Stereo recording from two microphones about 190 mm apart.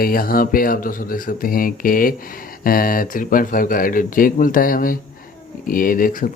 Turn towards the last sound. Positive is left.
turn(degrees=45)  # may be behind; listen again after turning